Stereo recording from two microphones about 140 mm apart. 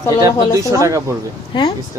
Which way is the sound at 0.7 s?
25° right (ahead or behind).